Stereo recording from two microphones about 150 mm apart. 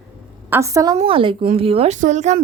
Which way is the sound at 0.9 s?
35° right (ahead or behind).